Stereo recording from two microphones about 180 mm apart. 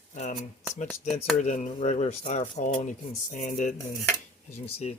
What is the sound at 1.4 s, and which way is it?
Speech, 40° left (ahead or behind).